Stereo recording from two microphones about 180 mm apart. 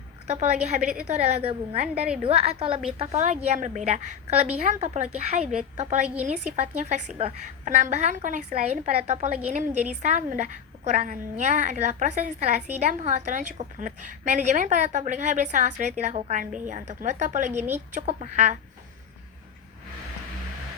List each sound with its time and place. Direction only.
0.3 s a woman's voice: 40° right (ahead or behind)